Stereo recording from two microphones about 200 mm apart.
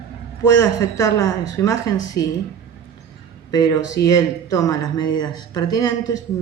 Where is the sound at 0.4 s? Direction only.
15° left (ahead or behind).